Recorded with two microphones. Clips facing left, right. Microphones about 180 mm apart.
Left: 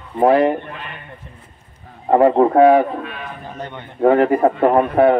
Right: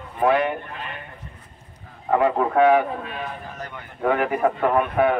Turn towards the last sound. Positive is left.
turn(degrees=35)  # may be behind; listen again after turning